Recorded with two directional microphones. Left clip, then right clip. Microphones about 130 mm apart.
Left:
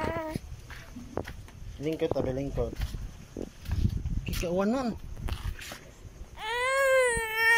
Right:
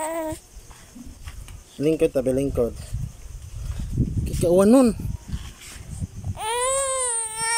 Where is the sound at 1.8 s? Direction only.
55° right (ahead or behind).